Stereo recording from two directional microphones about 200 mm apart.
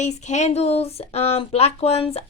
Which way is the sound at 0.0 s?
35° left (ahead or behind).